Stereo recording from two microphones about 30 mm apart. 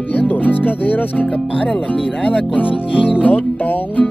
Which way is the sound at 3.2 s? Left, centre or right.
Left.